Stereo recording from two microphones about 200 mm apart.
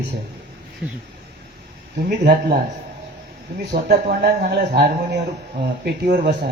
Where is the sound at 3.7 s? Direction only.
55° right (ahead or behind).